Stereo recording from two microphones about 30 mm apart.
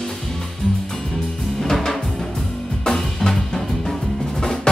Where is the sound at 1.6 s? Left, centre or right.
Centre.